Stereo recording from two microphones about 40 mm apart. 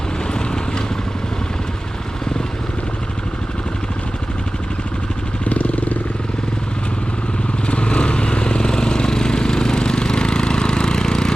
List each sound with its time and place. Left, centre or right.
0.3 s vehicle: centre
5.5 s vehicle: left
7.7 s vehicle: left